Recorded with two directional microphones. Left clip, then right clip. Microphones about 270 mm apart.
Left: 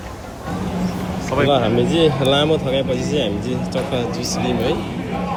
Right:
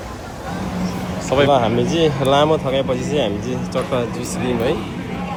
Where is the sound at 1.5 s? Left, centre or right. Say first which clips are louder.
Right 1 dB; centre.